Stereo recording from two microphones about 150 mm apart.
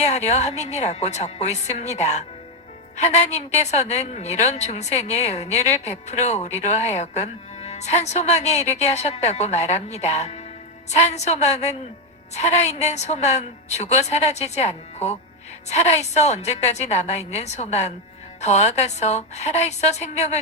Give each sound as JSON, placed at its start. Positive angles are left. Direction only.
{"t": 0.0, "sound": "a woman's voice", "side_deg": 50}